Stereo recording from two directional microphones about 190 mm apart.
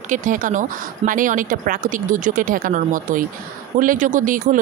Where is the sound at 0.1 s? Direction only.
45° right (ahead or behind).